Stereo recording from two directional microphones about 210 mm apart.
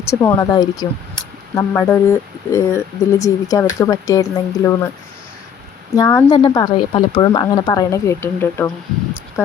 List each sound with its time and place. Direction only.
0.1 s a woman's voice: 15° left (ahead or behind)
6.0 s a woman's voice: 15° left (ahead or behind)